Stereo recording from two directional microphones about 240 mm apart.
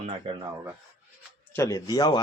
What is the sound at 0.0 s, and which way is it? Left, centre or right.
Speech, right.